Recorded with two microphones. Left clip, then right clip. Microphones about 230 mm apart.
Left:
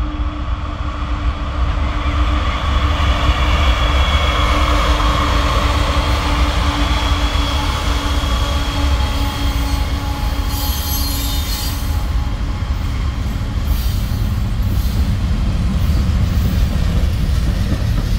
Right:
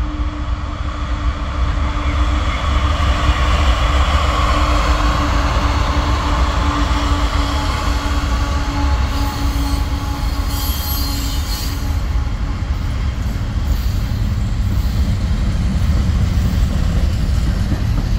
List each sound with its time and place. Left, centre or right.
2.7 s train: centre; by 6.3 s left